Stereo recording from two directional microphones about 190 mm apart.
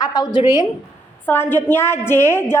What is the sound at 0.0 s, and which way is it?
A woman's voice, 20° left (ahead or behind).